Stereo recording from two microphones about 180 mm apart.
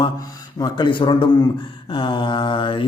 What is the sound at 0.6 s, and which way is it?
Speech, 25° left (ahead or behind).